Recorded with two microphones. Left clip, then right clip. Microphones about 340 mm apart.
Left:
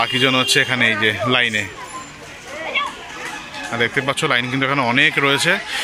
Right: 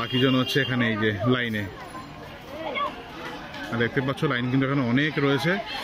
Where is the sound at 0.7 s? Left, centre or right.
Left.